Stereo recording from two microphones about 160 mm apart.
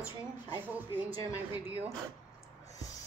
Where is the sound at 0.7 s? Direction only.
10° right (ahead or behind).